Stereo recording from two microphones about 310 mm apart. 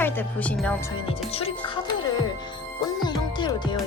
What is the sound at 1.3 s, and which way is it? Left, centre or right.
Speech, centre.